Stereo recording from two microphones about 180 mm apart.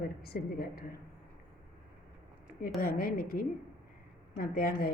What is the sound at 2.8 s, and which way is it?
Speech, 55° left (ahead or behind).